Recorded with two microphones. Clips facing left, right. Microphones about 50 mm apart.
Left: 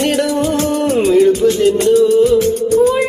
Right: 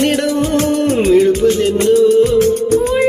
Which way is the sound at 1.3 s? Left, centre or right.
Right.